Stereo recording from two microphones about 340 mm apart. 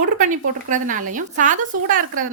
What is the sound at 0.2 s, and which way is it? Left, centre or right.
Speech, right.